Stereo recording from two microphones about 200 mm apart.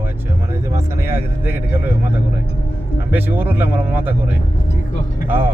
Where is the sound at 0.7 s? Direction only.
10° right (ahead or behind).